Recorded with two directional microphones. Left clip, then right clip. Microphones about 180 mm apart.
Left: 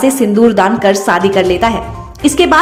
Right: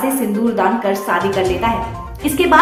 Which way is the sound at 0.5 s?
40° left (ahead or behind).